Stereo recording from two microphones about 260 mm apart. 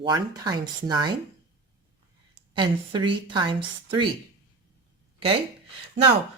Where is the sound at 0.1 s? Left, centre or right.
Centre.